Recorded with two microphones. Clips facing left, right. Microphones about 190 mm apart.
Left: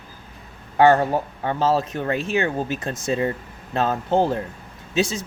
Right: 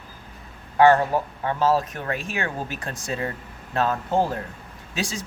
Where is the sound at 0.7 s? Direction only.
25° left (ahead or behind).